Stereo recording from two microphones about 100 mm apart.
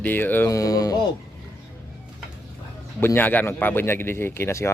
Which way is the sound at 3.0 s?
20° left (ahead or behind).